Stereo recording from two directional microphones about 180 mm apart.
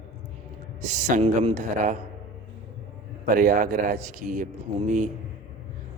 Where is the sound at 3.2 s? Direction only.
50° right (ahead or behind).